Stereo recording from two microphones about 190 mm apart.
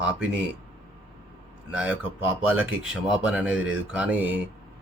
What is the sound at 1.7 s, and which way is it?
Speech, 5° right (ahead or behind).